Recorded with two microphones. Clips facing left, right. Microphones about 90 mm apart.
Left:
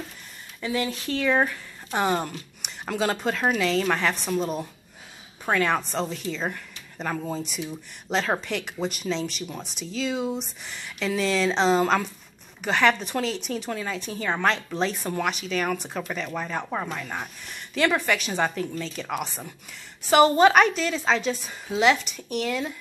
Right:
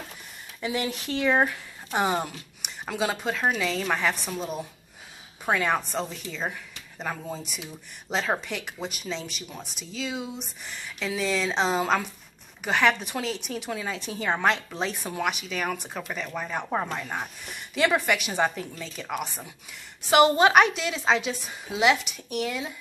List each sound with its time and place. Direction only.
0.6 s speech: 20° right (ahead or behind)
1.9 s a woman's voice: 5° right (ahead or behind)
16.7 s a woman's voice: 15° right (ahead or behind)
20.1 s a woman's voice: 15° right (ahead or behind)